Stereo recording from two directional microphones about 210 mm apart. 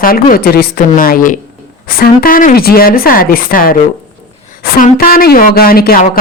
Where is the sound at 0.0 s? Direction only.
45° left (ahead or behind).